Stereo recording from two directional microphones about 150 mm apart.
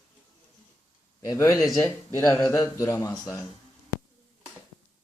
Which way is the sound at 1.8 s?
20° left (ahead or behind).